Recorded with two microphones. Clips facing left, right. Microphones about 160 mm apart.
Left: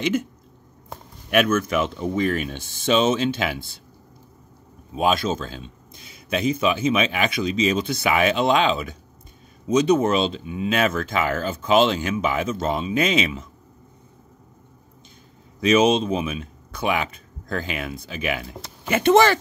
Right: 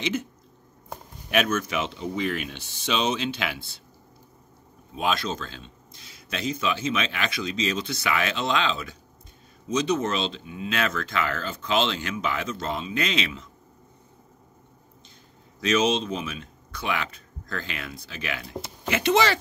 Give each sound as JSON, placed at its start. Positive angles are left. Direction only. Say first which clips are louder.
{"t": 0.0, "sound": "speech", "louder": "left 5 dB", "side_deg": 50}
{"t": 1.3, "sound": "speech", "louder": "left 5 dB", "side_deg": 50}
{"t": 4.9, "sound": "speech", "louder": "left 6 dB", "side_deg": 50}
{"t": 15.6, "sound": "speech", "louder": "left 6 dB", "side_deg": 55}